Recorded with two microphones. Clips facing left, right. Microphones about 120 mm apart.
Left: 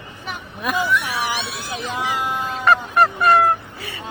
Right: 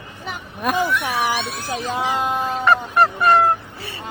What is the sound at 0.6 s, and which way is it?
Cat, 50° right (ahead or behind).